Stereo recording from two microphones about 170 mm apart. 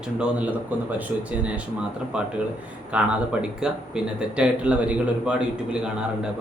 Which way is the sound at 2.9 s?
5° right (ahead or behind).